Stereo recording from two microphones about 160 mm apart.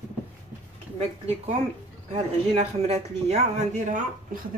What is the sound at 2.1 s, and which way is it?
Speech, 40° right (ahead or behind).